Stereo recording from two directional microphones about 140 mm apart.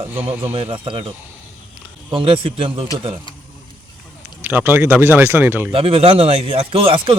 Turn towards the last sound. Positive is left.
turn(degrees=-40)  # may be behind; listen again after turning